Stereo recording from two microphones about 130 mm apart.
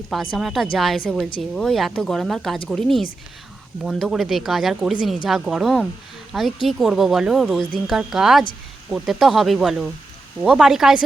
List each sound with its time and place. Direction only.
0.1 s speech: centre (ahead or behind)